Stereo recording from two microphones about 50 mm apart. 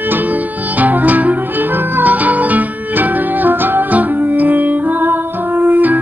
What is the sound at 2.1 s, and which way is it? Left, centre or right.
Music, right.